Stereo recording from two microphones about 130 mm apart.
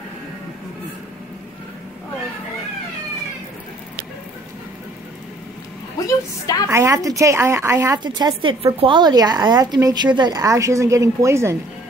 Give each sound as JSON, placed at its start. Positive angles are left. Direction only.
{"t": 5.9, "sound": "a woman's voice", "side_deg": 25}
{"t": 6.7, "sound": "a woman's voice", "side_deg": -25}
{"t": 8.0, "sound": "a woman's voice", "side_deg": -35}